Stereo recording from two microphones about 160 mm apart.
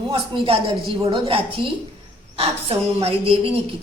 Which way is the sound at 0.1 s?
35° right (ahead or behind).